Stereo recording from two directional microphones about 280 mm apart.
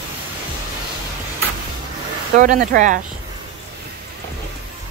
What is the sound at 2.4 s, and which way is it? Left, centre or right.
Speech, right.